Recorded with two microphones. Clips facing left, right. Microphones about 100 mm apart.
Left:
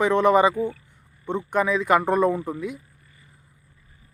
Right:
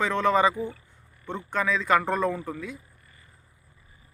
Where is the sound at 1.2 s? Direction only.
15° left (ahead or behind).